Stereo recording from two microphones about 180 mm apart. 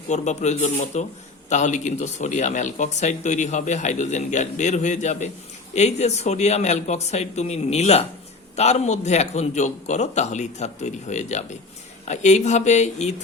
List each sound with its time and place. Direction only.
0.1 s speech: 40° left (ahead or behind)